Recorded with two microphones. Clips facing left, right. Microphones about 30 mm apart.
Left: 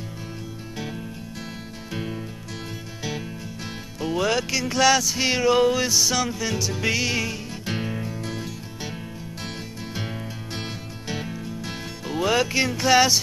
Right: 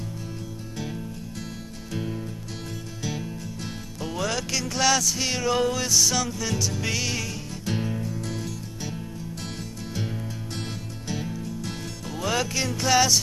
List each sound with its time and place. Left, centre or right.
1.9 s music: left
9.9 s music: left